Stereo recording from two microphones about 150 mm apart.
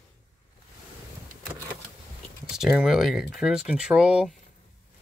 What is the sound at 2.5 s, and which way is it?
Speech, 5° right (ahead or behind).